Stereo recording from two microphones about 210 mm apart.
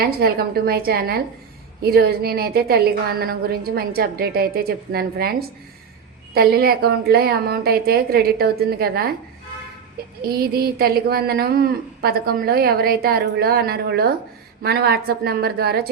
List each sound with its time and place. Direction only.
0.0 s a woman's voice: 45° right (ahead or behind)
10.2 s a woman's voice: 45° right (ahead or behind)